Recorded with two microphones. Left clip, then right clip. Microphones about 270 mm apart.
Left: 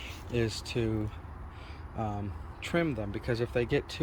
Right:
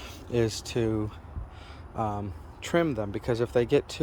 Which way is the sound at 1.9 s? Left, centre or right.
Centre.